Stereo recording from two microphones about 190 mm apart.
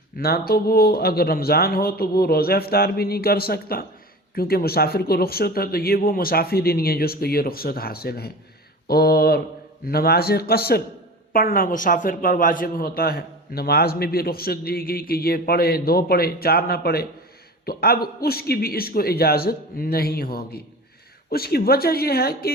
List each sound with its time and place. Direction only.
0.2 s a man's voice: 55° left (ahead or behind)
8.9 s a sound: 55° left (ahead or behind)
9.8 s a man's voice: 55° left (ahead or behind)